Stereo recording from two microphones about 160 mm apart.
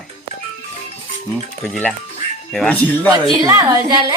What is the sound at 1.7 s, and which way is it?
Speech, 10° left (ahead or behind).